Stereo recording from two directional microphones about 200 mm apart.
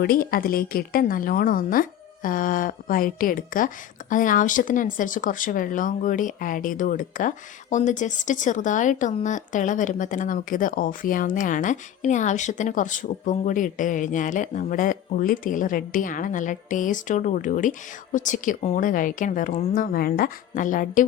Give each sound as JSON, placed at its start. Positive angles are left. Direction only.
{"t": 0.0, "sound": "speech", "side_deg": 50}